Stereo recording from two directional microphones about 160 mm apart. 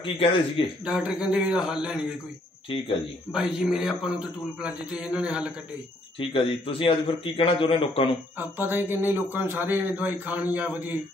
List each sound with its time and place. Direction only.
0.0 s a man's voice: 35° left (ahead or behind)
0.8 s a man's voice: 5° right (ahead or behind)
3.3 s a man's voice: 5° right (ahead or behind)
6.1 s a man's voice: 35° left (ahead or behind)
8.4 s a man's voice: 10° right (ahead or behind)